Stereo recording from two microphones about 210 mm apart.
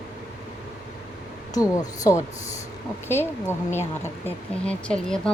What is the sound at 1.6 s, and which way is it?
A woman's voice, 15° left (ahead or behind).